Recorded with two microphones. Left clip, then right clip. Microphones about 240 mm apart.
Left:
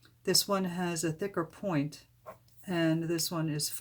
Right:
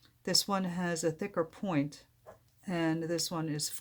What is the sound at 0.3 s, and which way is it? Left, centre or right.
Speech, right.